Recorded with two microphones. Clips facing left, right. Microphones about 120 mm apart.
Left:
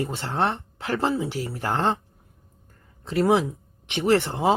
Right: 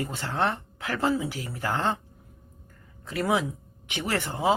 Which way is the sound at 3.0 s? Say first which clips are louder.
Left 5 dB; 30° left (ahead or behind).